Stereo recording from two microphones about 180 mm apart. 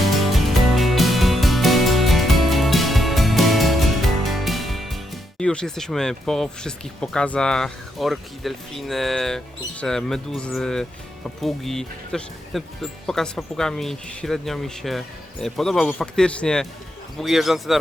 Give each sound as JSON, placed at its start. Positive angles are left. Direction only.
{"t": 0.0, "sound": "music", "side_deg": 0}
{"t": 17.2, "sound": "speech", "side_deg": 0}